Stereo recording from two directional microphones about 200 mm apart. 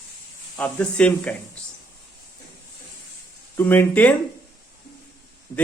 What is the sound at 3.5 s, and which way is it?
Speech, 10° left (ahead or behind).